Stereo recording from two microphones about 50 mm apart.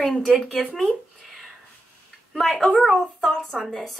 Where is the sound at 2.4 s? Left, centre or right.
Centre.